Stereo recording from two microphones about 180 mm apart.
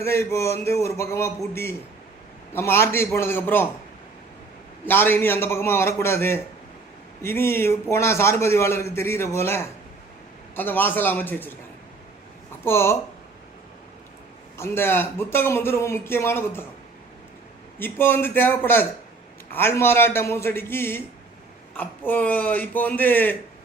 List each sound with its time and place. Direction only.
0.0 s a man's voice: 15° left (ahead or behind)
2.5 s a man's voice: 15° left (ahead or behind)
4.9 s a man's voice: 10° left (ahead or behind)
12.6 s a man's voice: 15° left (ahead or behind)
14.6 s a man's voice: 10° left (ahead or behind)
17.7 s a man's voice: 10° left (ahead or behind)